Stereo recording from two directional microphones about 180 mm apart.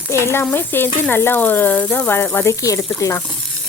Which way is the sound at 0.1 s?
15° left (ahead or behind).